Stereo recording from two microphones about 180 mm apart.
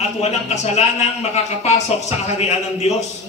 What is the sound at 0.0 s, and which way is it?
Speech, 35° left (ahead or behind).